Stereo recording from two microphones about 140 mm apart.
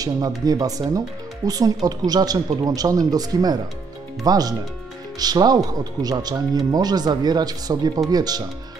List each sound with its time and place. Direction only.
0.5 s speech: 25° right (ahead or behind)